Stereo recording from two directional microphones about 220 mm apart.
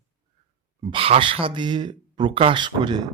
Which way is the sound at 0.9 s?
25° right (ahead or behind).